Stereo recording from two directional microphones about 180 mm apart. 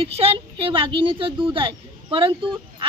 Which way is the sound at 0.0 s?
30° right (ahead or behind).